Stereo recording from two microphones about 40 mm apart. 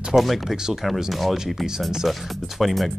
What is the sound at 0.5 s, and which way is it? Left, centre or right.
Speech, centre.